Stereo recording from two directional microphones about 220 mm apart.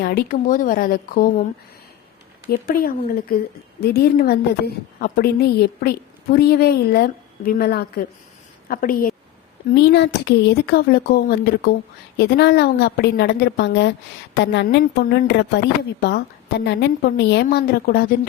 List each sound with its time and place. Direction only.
0.0 s speech: 45° left (ahead or behind)
2.5 s speech: 40° left (ahead or behind)